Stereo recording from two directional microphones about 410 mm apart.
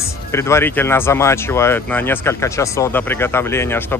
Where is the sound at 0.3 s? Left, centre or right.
Centre.